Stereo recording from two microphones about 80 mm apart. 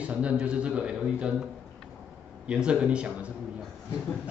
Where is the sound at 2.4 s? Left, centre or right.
Centre.